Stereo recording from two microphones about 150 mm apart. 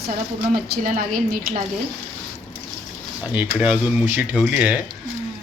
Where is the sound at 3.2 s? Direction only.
10° right (ahead or behind).